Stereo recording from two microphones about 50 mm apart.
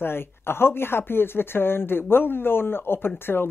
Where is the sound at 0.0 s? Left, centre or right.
Left.